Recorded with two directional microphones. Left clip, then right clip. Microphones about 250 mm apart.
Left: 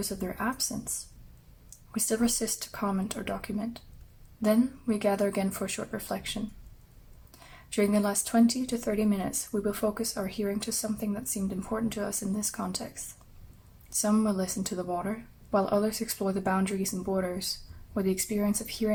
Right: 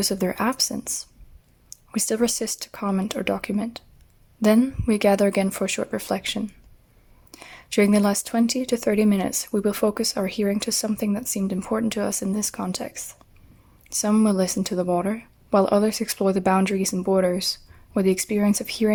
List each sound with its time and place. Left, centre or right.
0.0 s speech: right